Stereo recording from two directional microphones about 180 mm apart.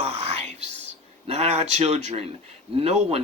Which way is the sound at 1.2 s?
35° right (ahead or behind).